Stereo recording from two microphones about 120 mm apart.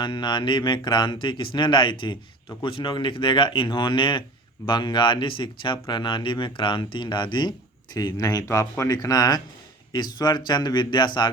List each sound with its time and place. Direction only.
0.0 s speech: 40° left (ahead or behind)